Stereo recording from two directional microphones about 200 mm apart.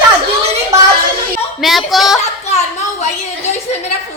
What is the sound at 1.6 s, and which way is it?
Speech, centre (ahead or behind).